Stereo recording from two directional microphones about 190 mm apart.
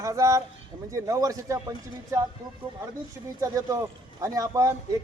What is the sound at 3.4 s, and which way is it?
A man's voice, 15° right (ahead or behind).